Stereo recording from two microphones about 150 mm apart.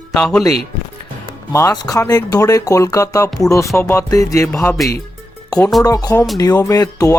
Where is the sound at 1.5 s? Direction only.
20° left (ahead or behind).